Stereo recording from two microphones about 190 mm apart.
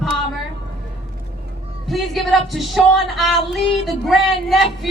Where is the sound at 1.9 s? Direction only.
Centre (ahead or behind).